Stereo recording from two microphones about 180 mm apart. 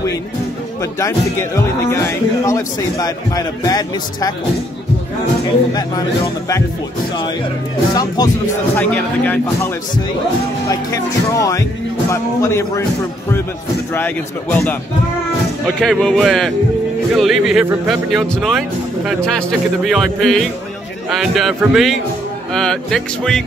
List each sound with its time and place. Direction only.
0.9 s a man's voice: 15° left (ahead or behind)
5.7 s a man's voice: 20° left (ahead or behind)
7.9 s a man's voice: 20° left (ahead or behind)
8.7 s speech: 10° left (ahead or behind)
10.7 s speech: 20° left (ahead or behind)
13.9 s speech: 10° left (ahead or behind)